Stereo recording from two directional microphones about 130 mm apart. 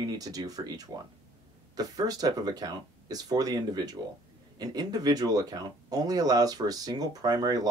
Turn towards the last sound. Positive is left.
turn(degrees=-30)  # may be behind; listen again after turning